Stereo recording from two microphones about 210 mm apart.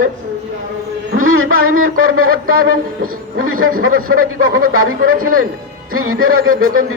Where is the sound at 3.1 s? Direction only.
80° right.